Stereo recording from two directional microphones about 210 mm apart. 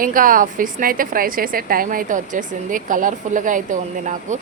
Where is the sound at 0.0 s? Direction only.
40° right (ahead or behind).